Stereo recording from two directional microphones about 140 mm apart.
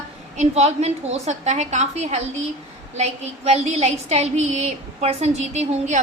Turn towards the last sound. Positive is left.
turn(degrees=-55)  # may be behind; listen again after turning